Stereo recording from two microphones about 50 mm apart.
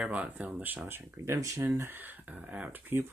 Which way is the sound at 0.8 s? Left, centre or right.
Right.